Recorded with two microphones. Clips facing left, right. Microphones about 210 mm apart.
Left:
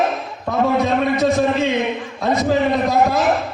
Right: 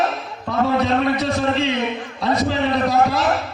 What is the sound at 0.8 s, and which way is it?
A man's voice, 45° left (ahead or behind).